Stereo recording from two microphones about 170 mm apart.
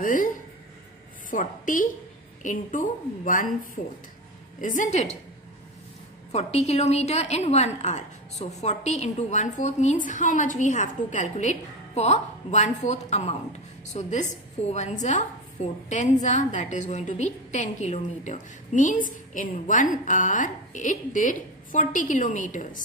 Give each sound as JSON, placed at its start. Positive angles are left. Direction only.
{"t": 0.0, "sound": "a woman's voice", "side_deg": 50}
{"t": 1.3, "sound": "a woman's voice", "side_deg": 50}
{"t": 6.3, "sound": "a woman's voice", "side_deg": 40}